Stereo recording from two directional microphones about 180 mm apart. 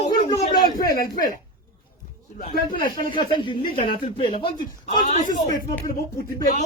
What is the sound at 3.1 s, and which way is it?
A man's voice, 25° left (ahead or behind).